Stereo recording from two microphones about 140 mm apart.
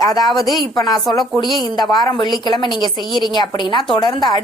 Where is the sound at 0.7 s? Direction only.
30° left (ahead or behind).